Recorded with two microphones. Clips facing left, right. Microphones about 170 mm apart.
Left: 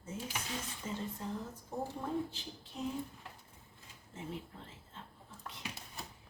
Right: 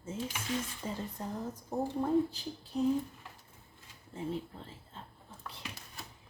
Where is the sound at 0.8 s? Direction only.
35° right (ahead or behind).